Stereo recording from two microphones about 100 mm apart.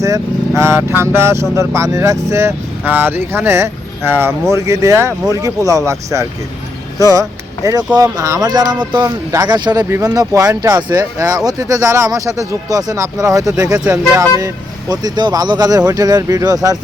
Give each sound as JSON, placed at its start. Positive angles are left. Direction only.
{"t": 0.0, "sound": "speech", "side_deg": -30}
{"t": 13.8, "sound": "speech", "side_deg": -10}
{"t": 14.2, "sound": "speech", "side_deg": -30}